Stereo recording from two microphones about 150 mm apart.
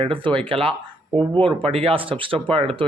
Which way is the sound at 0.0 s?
35° right (ahead or behind).